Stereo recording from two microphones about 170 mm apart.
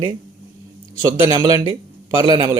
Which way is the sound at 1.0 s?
20° right (ahead or behind).